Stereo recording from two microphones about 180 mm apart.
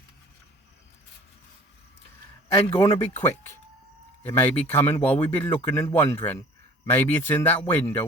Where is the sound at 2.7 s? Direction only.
30° left (ahead or behind).